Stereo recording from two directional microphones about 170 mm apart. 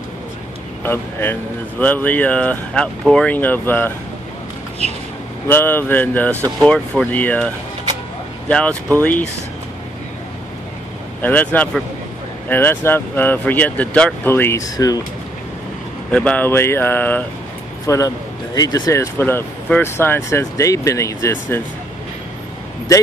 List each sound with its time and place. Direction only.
0.8 s speech: 15° left (ahead or behind)
5.5 s speech: 15° left (ahead or behind)
11.2 s speech: 10° left (ahead or behind)
16.1 s speech: 5° left (ahead or behind)